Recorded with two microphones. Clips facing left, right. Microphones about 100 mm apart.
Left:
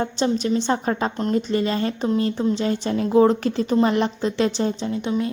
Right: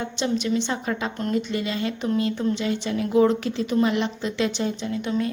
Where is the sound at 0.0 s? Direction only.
40° left (ahead or behind).